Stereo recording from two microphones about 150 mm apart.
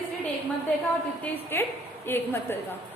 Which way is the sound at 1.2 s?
15° left (ahead or behind).